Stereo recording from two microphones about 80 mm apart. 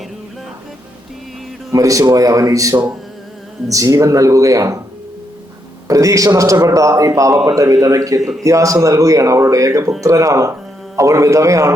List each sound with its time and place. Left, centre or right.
1.7 s a man's voice: right
5.9 s a man's voice: right